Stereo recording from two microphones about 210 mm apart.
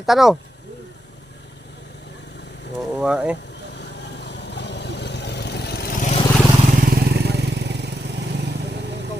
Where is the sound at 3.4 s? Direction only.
55° left (ahead or behind); by 6.2 s 35° left (ahead or behind).